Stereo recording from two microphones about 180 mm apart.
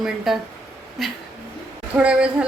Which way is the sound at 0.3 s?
Centre (ahead or behind).